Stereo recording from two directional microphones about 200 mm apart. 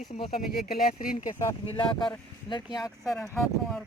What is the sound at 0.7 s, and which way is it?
Speech, 45° left (ahead or behind).